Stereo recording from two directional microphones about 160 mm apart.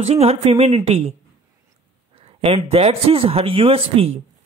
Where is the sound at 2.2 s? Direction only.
35° right (ahead or behind).